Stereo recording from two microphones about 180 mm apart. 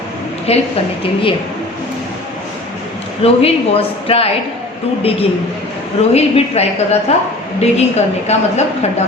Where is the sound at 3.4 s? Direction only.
30° left (ahead or behind).